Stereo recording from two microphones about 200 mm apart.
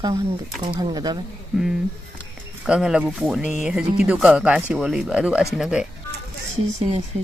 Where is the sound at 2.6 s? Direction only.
5° right (ahead or behind).